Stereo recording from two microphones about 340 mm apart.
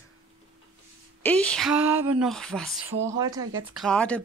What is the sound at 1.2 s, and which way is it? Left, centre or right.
Speech, centre.